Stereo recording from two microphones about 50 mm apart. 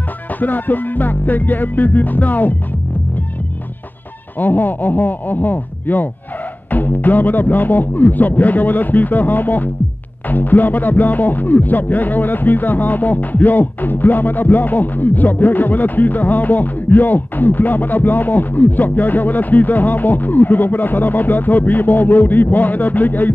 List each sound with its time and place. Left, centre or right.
0.4 s music: left
4.4 s music: left